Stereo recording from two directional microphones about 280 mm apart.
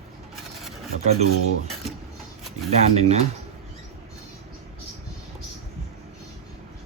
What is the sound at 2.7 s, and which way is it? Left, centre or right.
Speech, right.